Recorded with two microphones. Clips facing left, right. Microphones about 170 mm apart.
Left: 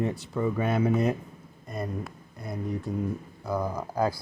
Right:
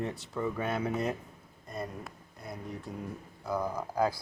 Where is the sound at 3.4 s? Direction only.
Centre (ahead or behind).